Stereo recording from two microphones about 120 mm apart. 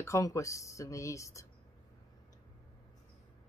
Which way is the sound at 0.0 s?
25° left (ahead or behind).